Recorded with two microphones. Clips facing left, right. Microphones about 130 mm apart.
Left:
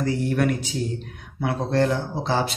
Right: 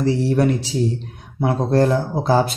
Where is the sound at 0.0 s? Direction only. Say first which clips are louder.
Right 5 dB; 30° right (ahead or behind).